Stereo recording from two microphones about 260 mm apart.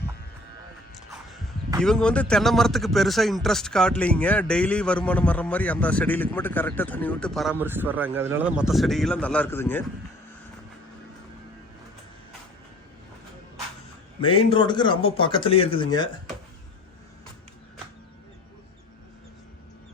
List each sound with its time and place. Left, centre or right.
1.8 s speech: centre
14.2 s speech: centre